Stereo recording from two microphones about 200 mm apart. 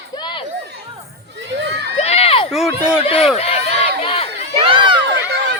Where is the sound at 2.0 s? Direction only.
30° left (ahead or behind).